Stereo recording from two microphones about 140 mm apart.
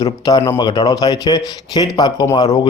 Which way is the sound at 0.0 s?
30° left (ahead or behind).